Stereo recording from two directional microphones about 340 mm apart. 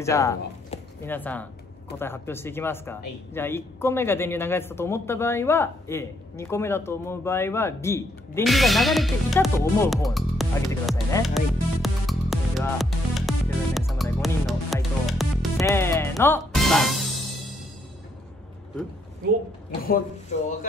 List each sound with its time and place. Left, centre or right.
0.0 s speech: centre
19.8 s speech: left